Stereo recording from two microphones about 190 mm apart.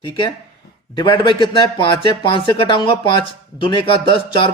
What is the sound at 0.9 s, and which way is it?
Speech, 25° left (ahead or behind).